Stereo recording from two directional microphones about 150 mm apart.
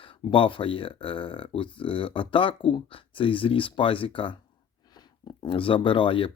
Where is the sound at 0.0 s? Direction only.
35° left (ahead or behind).